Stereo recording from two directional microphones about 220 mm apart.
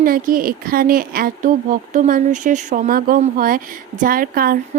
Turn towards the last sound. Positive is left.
turn(degrees=-40)  # may be behind; listen again after turning